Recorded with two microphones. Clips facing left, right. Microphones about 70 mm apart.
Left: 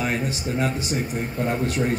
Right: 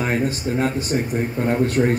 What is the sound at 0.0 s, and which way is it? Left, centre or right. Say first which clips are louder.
A man's voice: right 4 dB; right.